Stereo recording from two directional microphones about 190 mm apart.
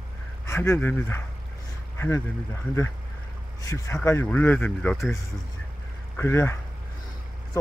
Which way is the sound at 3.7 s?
10° left (ahead or behind).